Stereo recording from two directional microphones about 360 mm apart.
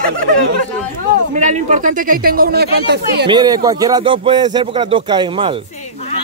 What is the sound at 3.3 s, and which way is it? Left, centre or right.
Speech, centre.